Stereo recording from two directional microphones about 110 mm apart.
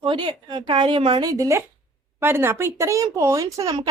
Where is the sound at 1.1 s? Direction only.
35° right (ahead or behind).